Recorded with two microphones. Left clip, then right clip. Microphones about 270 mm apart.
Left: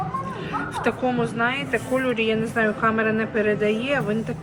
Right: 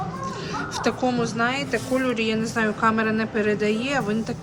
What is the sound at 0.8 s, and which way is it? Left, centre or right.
Speech, centre.